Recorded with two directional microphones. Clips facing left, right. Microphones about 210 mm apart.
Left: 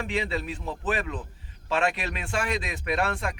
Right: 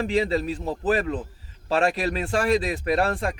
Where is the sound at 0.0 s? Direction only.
35° right (ahead or behind).